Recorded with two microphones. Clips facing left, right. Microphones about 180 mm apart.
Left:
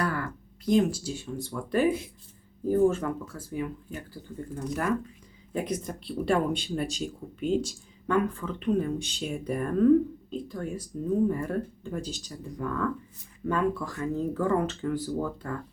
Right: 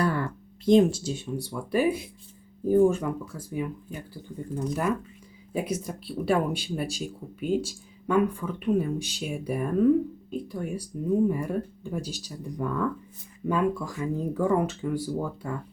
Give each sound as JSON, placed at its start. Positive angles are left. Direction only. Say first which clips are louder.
{"t": 0.0, "sound": "speech", "louder": "right 4 dB", "side_deg": -25}
{"t": 5.5, "sound": "speech", "louder": "right 1 dB", "side_deg": -5}